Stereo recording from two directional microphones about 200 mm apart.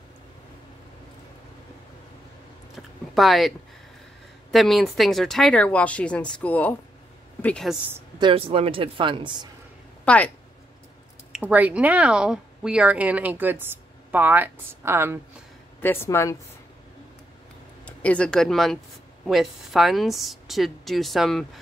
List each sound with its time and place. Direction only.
2.7 s a sound: centre (ahead or behind)
4.5 s a woman's voice: centre (ahead or behind)
8.2 s speech: 25° right (ahead or behind)
10.0 s a woman's voice: 5° left (ahead or behind)
11.3 s a woman's voice: 10° right (ahead or behind)
15.8 s speech: 10° left (ahead or behind)
17.8 s a woman's voice: 5° left (ahead or behind)